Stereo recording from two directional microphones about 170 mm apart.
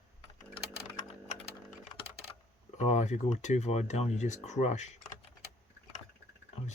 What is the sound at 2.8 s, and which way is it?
Speech, 45° left (ahead or behind).